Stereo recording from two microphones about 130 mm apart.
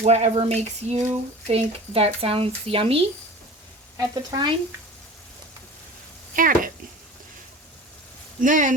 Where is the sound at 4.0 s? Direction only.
30° right (ahead or behind).